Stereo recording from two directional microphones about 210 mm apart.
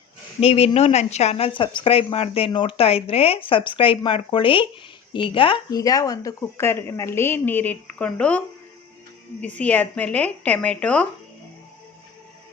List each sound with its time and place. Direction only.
0.3 s speech: 30° left (ahead or behind); by 11.1 s 5° left (ahead or behind)